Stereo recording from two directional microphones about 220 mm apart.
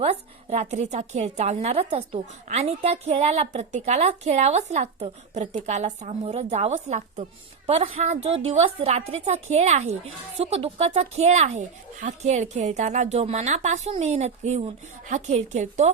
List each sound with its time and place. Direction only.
0.0 s a woman's voice: 30° right (ahead or behind)